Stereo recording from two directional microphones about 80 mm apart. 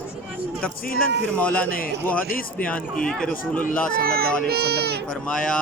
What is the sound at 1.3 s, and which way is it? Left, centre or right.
A man's voice, centre.